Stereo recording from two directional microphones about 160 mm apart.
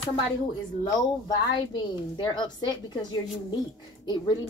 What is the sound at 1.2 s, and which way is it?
A woman's voice, 25° left (ahead or behind).